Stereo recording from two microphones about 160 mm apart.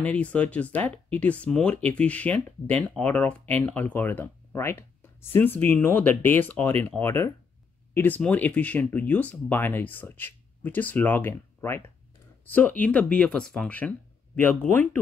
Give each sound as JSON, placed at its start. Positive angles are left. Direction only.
{"t": 0.0, "sound": "speech", "side_deg": 10}